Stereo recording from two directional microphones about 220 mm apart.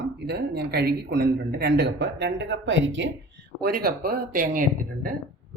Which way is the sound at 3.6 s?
45° right (ahead or behind).